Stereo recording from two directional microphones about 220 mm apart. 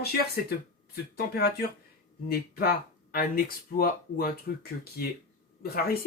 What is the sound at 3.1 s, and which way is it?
Speech, 45° left (ahead or behind).